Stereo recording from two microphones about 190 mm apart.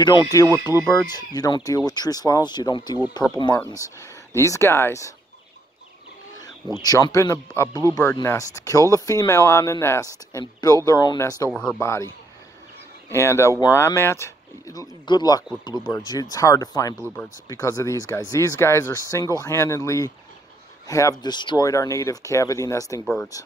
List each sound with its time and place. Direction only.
0.0 s speech: 20° left (ahead or behind)
6.8 s speech: 20° left (ahead or behind)
11.5 s speech: 10° left (ahead or behind)
13.1 s speech: 15° left (ahead or behind)